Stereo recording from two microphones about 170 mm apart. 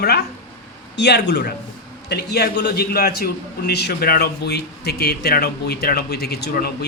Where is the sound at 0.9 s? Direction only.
85° left.